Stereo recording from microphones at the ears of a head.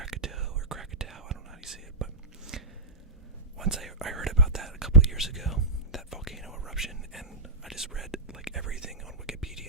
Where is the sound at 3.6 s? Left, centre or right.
Right.